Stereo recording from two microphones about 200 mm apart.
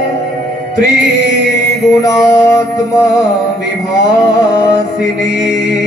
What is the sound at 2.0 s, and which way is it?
Mantra, 15° left (ahead or behind).